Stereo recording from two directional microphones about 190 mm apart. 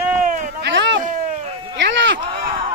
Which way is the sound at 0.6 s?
70° right (ahead or behind).